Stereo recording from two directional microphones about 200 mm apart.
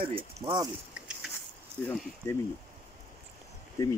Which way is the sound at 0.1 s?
25° right (ahead or behind).